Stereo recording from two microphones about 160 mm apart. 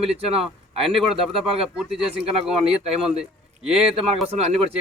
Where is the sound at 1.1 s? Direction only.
5° right (ahead or behind).